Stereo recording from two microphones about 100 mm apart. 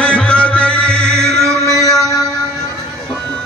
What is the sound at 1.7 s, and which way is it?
Mantra, 35° left (ahead or behind).